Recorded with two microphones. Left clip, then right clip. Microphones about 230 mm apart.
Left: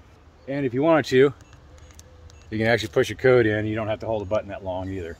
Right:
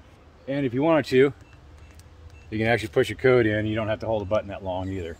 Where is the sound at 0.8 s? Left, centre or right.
Centre.